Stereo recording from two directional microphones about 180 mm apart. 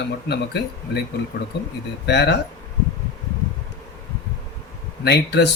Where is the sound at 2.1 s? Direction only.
65° left (ahead or behind).